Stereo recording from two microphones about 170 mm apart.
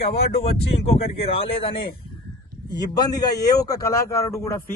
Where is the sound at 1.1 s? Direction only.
35° left (ahead or behind).